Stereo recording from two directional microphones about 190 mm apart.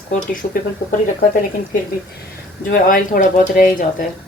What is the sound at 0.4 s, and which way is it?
Speech, 45° left (ahead or behind).